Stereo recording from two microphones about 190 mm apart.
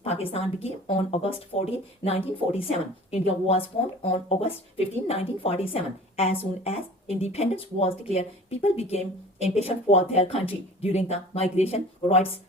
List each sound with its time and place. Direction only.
0.0 s speech: 30° left (ahead or behind)